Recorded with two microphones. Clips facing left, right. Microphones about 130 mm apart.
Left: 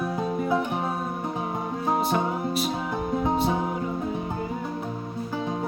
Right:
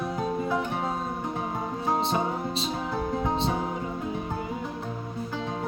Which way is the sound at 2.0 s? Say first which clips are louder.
Left 2 dB; 25° right (ahead or behind).